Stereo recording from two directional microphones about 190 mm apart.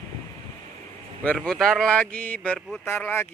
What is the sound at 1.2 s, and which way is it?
A man's voice, 5° left (ahead or behind).